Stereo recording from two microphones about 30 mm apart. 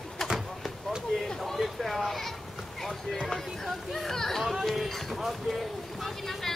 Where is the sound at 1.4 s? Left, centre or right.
Centre.